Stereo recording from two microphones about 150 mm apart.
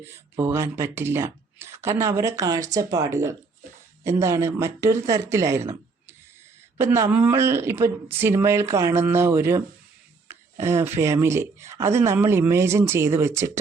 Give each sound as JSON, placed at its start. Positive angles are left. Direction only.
{"t": 0.0, "sound": "speech", "side_deg": -15}